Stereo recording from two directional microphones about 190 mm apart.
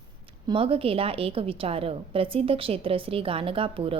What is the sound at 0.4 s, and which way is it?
A woman's voice, 30° right (ahead or behind).